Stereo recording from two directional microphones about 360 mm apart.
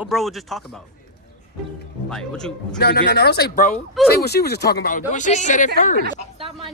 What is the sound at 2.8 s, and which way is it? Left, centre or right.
Speech, left.